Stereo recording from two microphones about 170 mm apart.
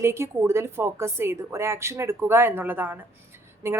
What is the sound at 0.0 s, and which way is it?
A woman's voice, 15° right (ahead or behind).